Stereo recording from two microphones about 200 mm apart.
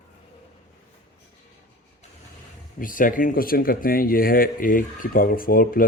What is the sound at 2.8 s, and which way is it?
Speech, 45° left (ahead or behind).